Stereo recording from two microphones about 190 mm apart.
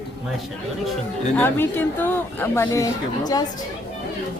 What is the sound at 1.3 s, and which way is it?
Speech, 10° left (ahead or behind).